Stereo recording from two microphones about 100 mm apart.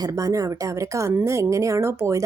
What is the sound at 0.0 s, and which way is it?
A woman's voice, 35° right (ahead or behind).